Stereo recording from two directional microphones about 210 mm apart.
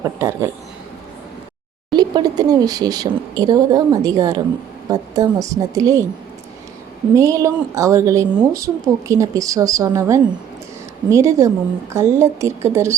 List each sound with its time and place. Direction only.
0.0 s a woman's voice: 15° right (ahead or behind)
1.9 s a woman's voice: 20° right (ahead or behind)
7.2 s a woman's voice: 15° right (ahead or behind)